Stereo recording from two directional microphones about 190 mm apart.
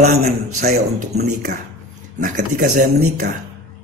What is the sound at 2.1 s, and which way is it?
A man's voice, 45° right (ahead or behind).